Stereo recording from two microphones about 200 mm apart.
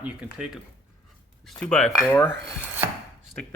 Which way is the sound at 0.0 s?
5° right (ahead or behind).